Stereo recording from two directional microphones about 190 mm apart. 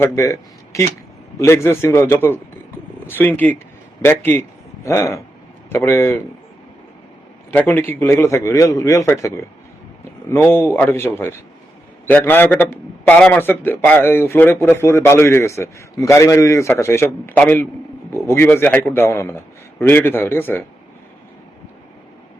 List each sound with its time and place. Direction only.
0.0 s a man's voice: 15° left (ahead or behind)
7.7 s a man's voice: 10° left (ahead or behind)